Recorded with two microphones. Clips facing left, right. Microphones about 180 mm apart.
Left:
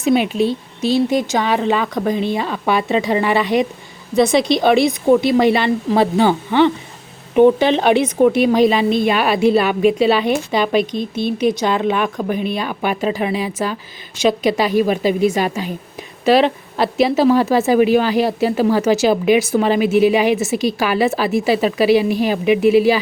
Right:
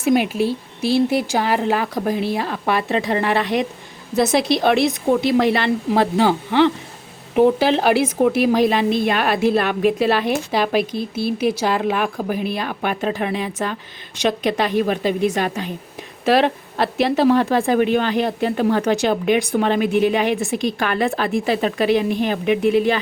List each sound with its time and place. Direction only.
0.3 s speech: 10° right (ahead or behind); by 23.0 s 5° left (ahead or behind)